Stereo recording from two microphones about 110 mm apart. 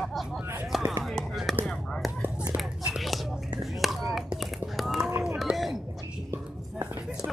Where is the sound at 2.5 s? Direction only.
5° right (ahead or behind).